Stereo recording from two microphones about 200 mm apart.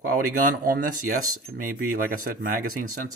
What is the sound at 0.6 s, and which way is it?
Speech, 45° right (ahead or behind).